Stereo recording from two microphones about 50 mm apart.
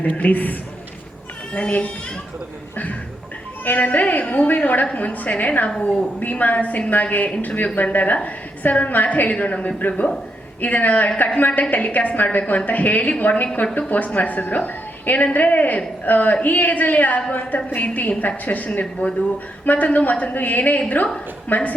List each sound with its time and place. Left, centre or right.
0.0 s a woman's voice: left
1.5 s a woman's voice: left
3.6 s a woman's voice: left